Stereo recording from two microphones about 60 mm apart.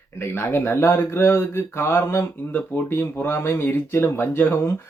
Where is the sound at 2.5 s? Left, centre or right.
Left.